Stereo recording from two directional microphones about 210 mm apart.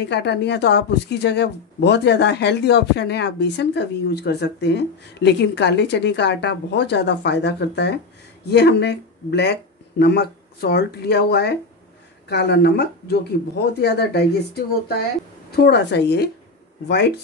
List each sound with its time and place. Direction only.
0.0 s speech: 55° left (ahead or behind)
15.5 s speech: 50° left (ahead or behind)